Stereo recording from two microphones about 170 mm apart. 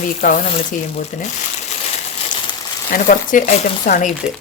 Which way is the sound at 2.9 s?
50° left (ahead or behind).